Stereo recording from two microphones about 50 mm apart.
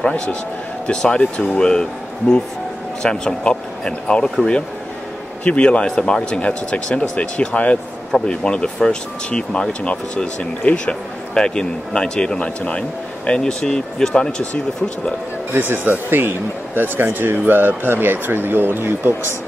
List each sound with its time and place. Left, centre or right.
0.8 s speech: centre
5.4 s speech: left
13.4 s speech: centre
15.7 s speech: right